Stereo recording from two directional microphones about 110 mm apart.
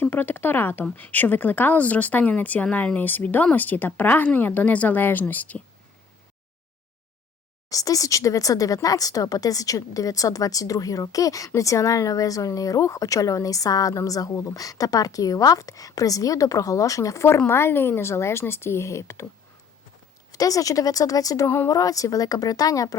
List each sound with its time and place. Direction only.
0.0 s speech: 20° left (ahead or behind)
7.7 s speech: 30° left (ahead or behind)
20.3 s speech: 35° left (ahead or behind)